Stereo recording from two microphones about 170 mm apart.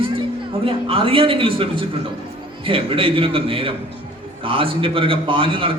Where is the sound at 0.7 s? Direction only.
35° right (ahead or behind).